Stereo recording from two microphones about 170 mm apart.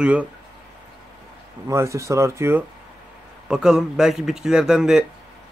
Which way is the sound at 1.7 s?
15° right (ahead or behind).